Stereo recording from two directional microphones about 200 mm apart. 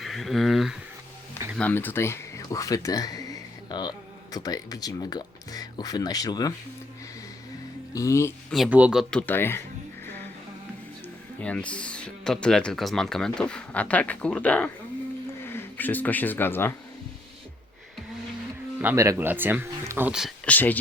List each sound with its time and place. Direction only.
0.0 s a sound: centre (ahead or behind)
1.5 s speech: 10° left (ahead or behind)
7.9 s speech: 15° left (ahead or behind)
8.5 s speech: 5° right (ahead or behind)
11.4 s speech: 5° left (ahead or behind)
18.8 s speech: 10° right (ahead or behind); by 20.7 s 10° left (ahead or behind)